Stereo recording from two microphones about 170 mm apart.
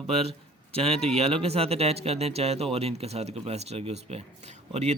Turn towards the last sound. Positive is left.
turn(degrees=-40)  # may be behind; listen again after turning